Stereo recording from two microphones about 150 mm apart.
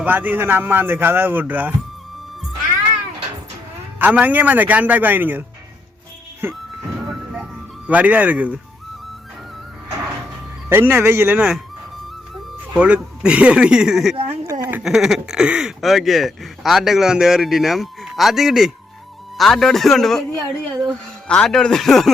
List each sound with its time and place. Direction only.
0.0 s speech: 10° right (ahead or behind)
3.9 s speech: 10° right (ahead or behind)
7.0 s music: centre (ahead or behind)
7.9 s speech: 10° right (ahead or behind)
10.7 s speech: 15° right (ahead or behind); by 22.1 s centre (ahead or behind)